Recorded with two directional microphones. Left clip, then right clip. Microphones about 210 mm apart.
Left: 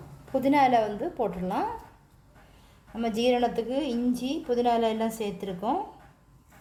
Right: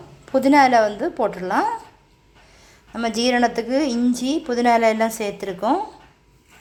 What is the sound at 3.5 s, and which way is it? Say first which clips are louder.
Speech: right 6 dB; 60° right (ahead or behind).